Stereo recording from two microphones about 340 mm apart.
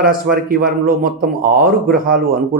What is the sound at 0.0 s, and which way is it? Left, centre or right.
A man's voice, right.